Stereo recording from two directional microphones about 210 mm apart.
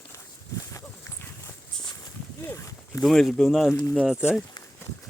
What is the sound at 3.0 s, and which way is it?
Speech, centre (ahead or behind).